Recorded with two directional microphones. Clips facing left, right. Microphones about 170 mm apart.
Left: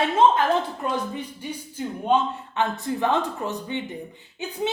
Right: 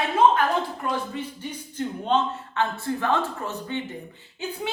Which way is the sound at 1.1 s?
10° left (ahead or behind).